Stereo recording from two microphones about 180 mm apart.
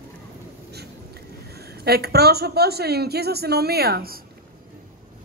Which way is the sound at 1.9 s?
60° right (ahead or behind).